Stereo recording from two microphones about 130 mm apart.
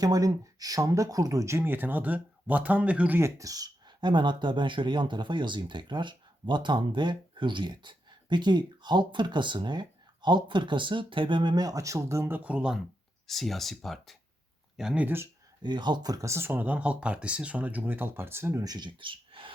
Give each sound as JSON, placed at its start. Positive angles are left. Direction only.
{"t": 0.0, "sound": "speech", "side_deg": -30}
{"t": 15.6, "sound": "speech", "side_deg": -35}